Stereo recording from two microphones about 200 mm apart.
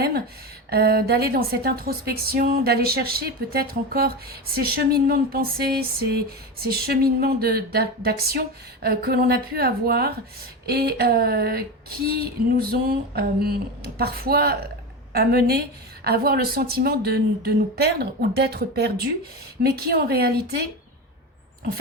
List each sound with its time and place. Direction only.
0.7 s a woman's voice: 50° right (ahead or behind)